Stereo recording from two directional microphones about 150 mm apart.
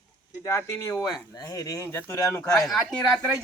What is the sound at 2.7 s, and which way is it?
Speech, centre (ahead or behind).